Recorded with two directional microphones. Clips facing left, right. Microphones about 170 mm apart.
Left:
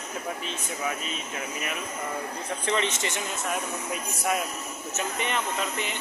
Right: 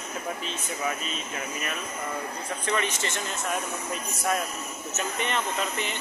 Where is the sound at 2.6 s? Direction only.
25° left (ahead or behind).